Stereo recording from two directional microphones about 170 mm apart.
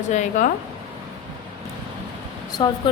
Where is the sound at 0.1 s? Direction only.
45° left (ahead or behind).